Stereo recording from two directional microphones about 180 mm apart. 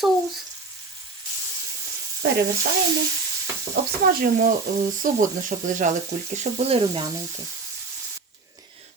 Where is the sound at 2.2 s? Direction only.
65° right (ahead or behind).